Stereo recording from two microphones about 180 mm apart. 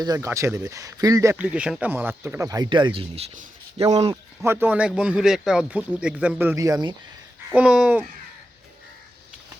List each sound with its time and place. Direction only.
0.0 s speech: 20° right (ahead or behind); by 3.8 s 35° right (ahead or behind)
4.1 s speech: 15° right (ahead or behind)
7.5 s speech: 5° right (ahead or behind)